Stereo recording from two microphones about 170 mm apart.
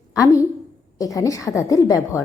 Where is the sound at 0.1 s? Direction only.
20° left (ahead or behind).